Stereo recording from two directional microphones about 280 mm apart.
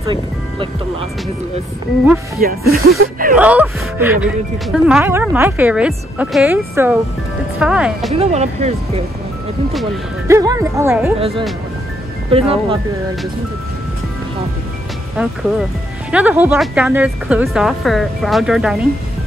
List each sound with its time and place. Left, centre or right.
0.0 s speech: centre
2.4 s speech: right
3.3 s speech: centre
8.1 s speech: right
10.2 s speech: centre
11.1 s speech: right
16.1 s speech: centre